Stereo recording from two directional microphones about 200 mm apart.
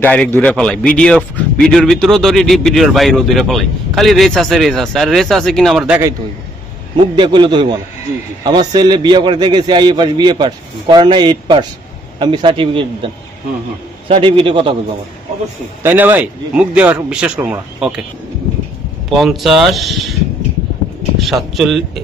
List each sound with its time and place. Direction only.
0.0 s a man's voice: 10° left (ahead or behind); by 6.1 s 10° right (ahead or behind)
7.0 s a man's voice: 25° right (ahead or behind)
15.8 s speech: 10° right (ahead or behind)
19.0 s a man's voice: centre (ahead or behind)
21.2 s a man's voice: centre (ahead or behind)